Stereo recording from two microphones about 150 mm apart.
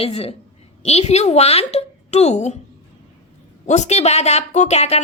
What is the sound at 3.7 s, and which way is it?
A woman's voice, 50° left (ahead or behind).